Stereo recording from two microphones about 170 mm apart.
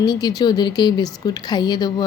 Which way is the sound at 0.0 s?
25° left (ahead or behind).